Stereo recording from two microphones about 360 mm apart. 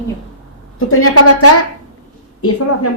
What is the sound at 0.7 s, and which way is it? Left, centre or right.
A woman's voice, left.